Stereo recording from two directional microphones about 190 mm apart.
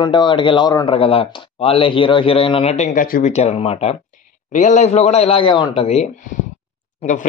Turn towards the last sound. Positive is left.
turn(degrees=40)  # may be behind; listen again after turning